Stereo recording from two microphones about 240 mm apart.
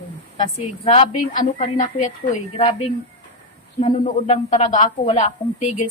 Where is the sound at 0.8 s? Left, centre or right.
Left.